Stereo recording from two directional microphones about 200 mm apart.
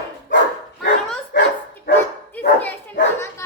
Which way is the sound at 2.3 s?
10° left (ahead or behind).